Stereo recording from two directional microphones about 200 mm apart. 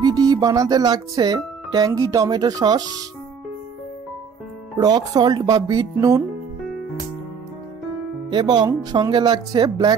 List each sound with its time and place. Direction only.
0.0 s speech: 20° right (ahead or behind)
4.7 s speech: 20° right (ahead or behind)
8.3 s speech: 20° right (ahead or behind)